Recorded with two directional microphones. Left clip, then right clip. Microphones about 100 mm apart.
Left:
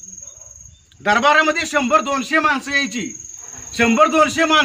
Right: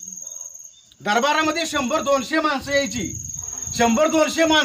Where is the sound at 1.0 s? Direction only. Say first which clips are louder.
Left 5 dB; 25° right (ahead or behind).